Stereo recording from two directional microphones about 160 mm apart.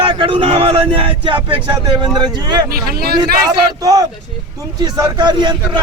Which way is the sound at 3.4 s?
20° right (ahead or behind).